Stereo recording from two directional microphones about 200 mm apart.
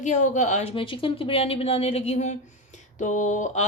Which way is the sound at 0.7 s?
25° left (ahead or behind).